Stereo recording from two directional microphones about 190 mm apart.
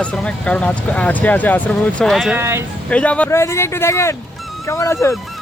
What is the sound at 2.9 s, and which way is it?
Speech, 5° left (ahead or behind).